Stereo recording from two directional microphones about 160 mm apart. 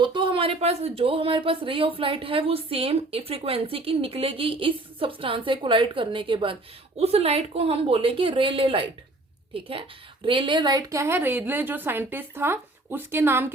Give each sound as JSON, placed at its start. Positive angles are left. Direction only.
{"t": 0.0, "sound": "a woman's voice", "side_deg": -30}